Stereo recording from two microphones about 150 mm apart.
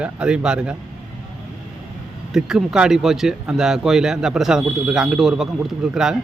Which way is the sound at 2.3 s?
5° right (ahead or behind).